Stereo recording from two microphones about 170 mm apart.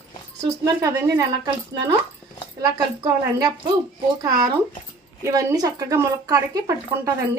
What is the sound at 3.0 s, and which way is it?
Speech, 20° right (ahead or behind).